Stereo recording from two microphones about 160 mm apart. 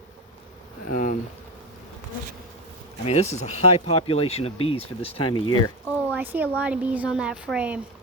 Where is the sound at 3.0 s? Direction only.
40° left (ahead or behind).